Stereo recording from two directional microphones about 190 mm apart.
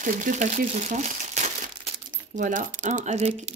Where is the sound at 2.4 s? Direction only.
45° right (ahead or behind).